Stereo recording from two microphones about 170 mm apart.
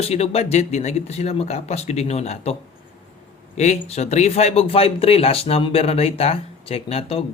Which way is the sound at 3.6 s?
40° left (ahead or behind).